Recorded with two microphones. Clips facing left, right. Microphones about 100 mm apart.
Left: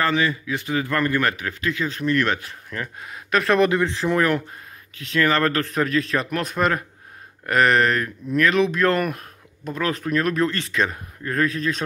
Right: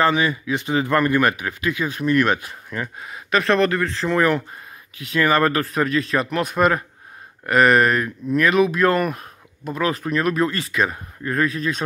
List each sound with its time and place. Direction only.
0.0 s a man's voice: 15° right (ahead or behind)
3.0 s speech: centre (ahead or behind)
3.5 s speech: 15° left (ahead or behind)
4.9 s speech: 10° right (ahead or behind)